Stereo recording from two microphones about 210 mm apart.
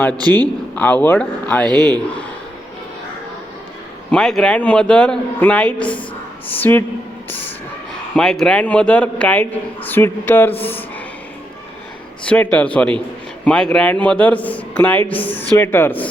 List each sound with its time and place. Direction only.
0.2 s a man's voice: 20° right (ahead or behind)
0.8 s a man's voice: 5° left (ahead or behind)
1.6 s a man's voice: 20° right (ahead or behind)
4.1 s a man's voice: centre (ahead or behind)
8.1 s a man's voice: centre (ahead or behind)
12.2 s a man's voice: 5° left (ahead or behind)